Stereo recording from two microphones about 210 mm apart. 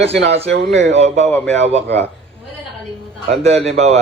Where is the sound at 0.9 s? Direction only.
30° right (ahead or behind).